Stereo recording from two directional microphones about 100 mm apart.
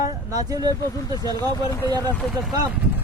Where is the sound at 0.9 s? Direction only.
35° left (ahead or behind).